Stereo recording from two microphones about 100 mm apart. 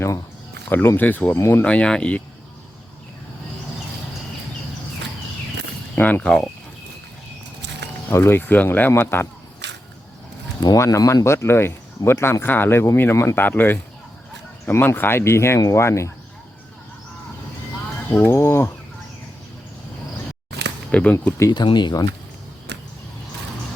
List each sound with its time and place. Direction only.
0.7 s speech: 20° left (ahead or behind)
6.0 s speech: 15° left (ahead or behind)
8.1 s speech: 25° left (ahead or behind)
10.6 s speech: 40° left (ahead or behind)
18.1 s speech: 25° left (ahead or behind)
20.9 s speech: 15° left (ahead or behind)
21.5 s speech: 50° left (ahead or behind)